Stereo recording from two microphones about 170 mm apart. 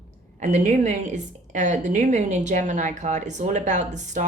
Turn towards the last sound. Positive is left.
turn(degrees=-45)  # may be behind; listen again after turning